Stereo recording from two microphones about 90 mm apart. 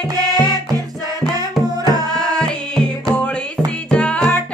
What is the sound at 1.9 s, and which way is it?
Music, 45° right (ahead or behind).